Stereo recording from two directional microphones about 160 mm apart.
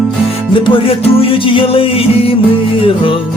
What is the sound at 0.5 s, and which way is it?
Music, 30° left (ahead or behind).